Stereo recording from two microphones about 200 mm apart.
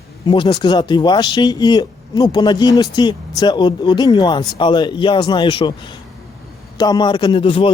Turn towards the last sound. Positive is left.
turn(degrees=25)  # may be behind; listen again after turning